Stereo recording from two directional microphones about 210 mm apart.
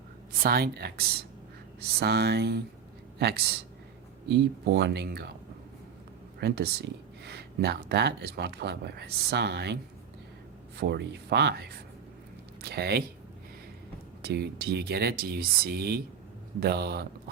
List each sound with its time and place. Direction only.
0.4 s speech: 45° right (ahead or behind)
6.4 s speech: 50° right (ahead or behind)
10.8 s speech: 55° right (ahead or behind)
14.2 s speech: 50° right (ahead or behind)